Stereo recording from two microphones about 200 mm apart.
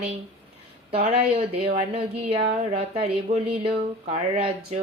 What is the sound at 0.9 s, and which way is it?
Speech, 30° right (ahead or behind).